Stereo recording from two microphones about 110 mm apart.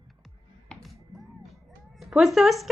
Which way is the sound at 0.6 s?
Centre (ahead or behind).